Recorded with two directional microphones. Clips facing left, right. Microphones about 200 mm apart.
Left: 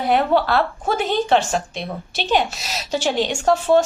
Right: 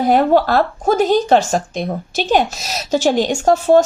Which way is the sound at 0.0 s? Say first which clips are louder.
Right 5 dB; 40° right (ahead or behind).